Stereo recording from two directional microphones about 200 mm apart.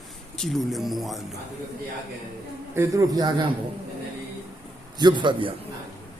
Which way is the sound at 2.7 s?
15° right (ahead or behind).